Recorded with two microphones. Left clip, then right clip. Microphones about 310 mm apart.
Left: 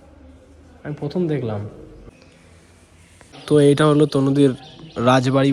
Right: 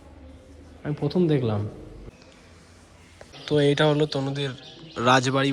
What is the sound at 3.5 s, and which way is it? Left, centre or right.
Speech, left.